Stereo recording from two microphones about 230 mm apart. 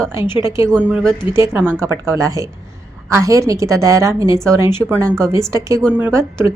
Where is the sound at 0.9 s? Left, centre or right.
Centre.